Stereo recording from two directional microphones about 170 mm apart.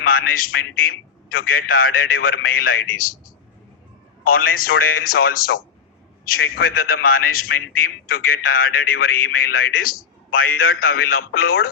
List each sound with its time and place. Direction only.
0.0 s a man's voice: 60° left (ahead or behind)
4.2 s a man's voice: 60° left (ahead or behind)